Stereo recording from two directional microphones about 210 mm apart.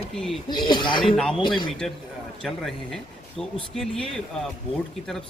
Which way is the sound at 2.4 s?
Centre (ahead or behind).